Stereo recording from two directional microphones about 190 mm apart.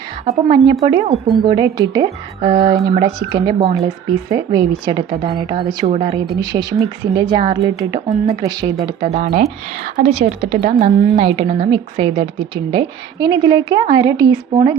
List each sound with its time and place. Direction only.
0.3 s a woman's voice: 25° right (ahead or behind)
5.8 s a woman's voice: 30° right (ahead or behind)
6.1 s a woman's voice: 20° right (ahead or behind)
7.9 s a woman's voice: 35° right (ahead or behind)
8.4 s a woman's voice: 20° right (ahead or behind)
9.3 s a woman's voice: 40° right (ahead or behind); by 14.3 s 20° right (ahead or behind)